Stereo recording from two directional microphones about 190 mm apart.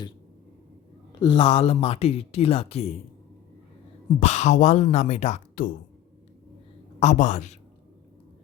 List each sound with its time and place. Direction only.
1.2 s speech: 30° left (ahead or behind)
4.2 s speech: 35° left (ahead or behind)
7.0 s speech: 40° left (ahead or behind)